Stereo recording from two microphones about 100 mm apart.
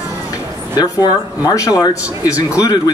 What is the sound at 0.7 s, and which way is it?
Speech, 40° left (ahead or behind).